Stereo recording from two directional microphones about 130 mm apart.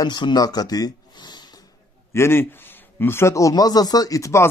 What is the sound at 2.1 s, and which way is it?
A man's voice, 20° left (ahead or behind).